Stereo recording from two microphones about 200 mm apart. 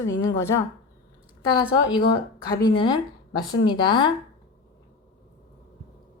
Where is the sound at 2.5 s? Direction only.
20° left (ahead or behind).